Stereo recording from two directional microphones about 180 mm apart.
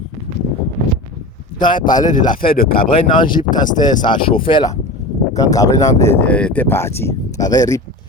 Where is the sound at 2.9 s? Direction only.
25° left (ahead or behind).